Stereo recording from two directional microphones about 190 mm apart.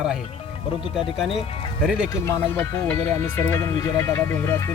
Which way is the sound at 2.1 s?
15° left (ahead or behind).